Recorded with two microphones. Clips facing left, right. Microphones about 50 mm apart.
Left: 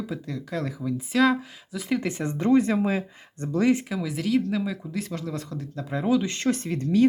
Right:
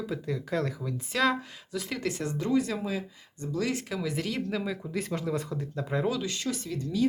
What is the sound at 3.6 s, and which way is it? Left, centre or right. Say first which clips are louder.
Speech: left 9 dB; left.